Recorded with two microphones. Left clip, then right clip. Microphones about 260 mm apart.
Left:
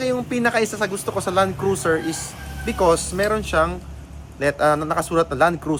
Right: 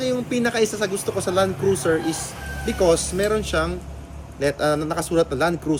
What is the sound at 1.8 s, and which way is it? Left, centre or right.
Speech, left.